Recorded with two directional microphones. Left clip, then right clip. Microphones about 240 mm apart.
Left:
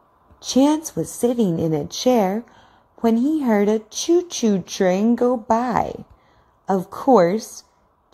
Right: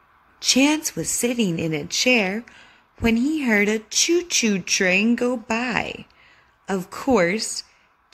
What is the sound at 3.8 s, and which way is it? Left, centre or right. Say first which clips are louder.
Speech: left 1 dB; centre.